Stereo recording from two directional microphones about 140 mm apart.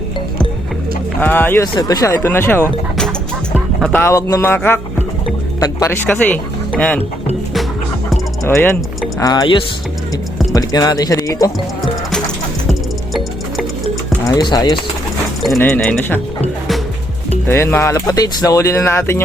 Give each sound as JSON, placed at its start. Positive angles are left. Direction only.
{"t": 1.2, "sound": "speech", "side_deg": 15}
{"t": 1.6, "sound": "speech", "side_deg": 25}
{"t": 5.5, "sound": "speech", "side_deg": 25}
{"t": 8.4, "sound": "speech", "side_deg": 15}
{"t": 9.2, "sound": "speech", "side_deg": 30}
{"t": 14.3, "sound": "speech", "side_deg": 25}
{"t": 15.5, "sound": "speech", "side_deg": 15}
{"t": 17.4, "sound": "speech", "side_deg": 15}